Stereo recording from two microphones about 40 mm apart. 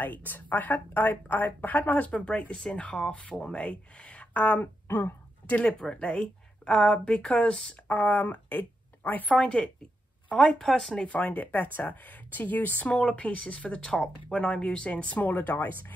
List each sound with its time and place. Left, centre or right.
0.0 s a woman's voice: left
4.3 s speech: left
5.6 s a woman's voice: left
7.9 s speech: left
10.3 s speech: centre
11.1 s speech: left
12.8 s a woman's voice: left
15.2 s speech: left